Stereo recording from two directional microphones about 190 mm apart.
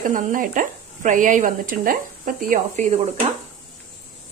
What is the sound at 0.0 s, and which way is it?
Speech, 45° right (ahead or behind).